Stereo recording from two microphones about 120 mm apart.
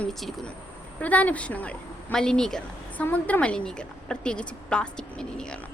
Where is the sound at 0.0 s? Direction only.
Centre (ahead or behind).